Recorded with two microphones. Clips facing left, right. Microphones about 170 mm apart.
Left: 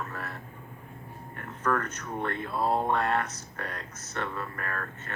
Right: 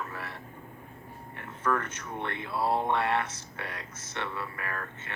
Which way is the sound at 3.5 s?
45° left (ahead or behind).